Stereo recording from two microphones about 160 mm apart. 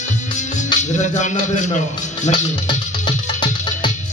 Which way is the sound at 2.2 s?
30° left (ahead or behind).